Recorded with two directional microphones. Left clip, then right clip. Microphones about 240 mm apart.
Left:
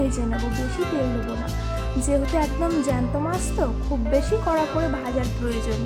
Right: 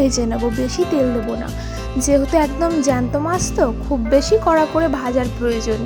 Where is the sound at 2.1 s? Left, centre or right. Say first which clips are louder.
Right 8 dB; right.